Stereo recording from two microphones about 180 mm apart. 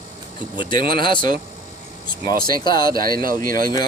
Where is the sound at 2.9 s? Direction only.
55° right (ahead or behind).